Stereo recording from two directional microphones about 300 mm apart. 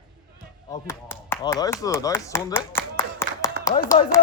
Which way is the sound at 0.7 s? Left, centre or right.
Centre.